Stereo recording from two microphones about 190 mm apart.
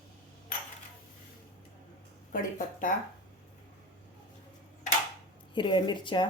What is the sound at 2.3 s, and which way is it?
Speech, 45° left (ahead or behind).